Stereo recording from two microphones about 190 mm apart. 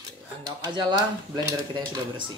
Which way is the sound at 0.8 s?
25° right (ahead or behind).